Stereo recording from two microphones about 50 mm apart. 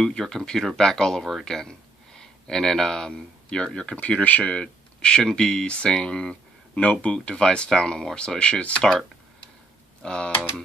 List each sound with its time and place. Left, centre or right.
0.0 s speech: centre
10.0 s speech: centre